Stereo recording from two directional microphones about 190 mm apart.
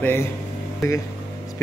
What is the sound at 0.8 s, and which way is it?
Speech, 15° left (ahead or behind).